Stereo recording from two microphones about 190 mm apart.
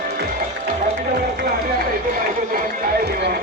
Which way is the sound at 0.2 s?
55° right (ahead or behind).